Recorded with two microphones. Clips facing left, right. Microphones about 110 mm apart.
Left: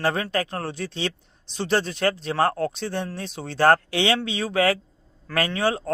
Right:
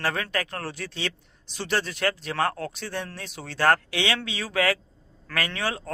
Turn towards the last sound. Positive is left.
turn(degrees=30)  # may be behind; listen again after turning